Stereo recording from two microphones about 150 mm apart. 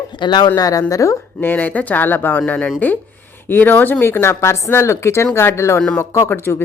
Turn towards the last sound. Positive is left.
turn(degrees=15)  # may be behind; listen again after turning